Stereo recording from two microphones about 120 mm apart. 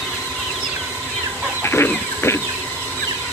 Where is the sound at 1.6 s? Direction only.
20° left (ahead or behind).